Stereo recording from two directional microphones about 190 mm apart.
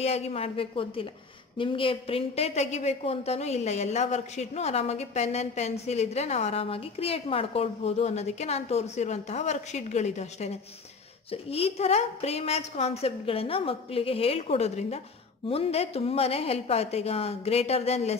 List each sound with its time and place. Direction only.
0.0 s a woman's voice: 35° left (ahead or behind)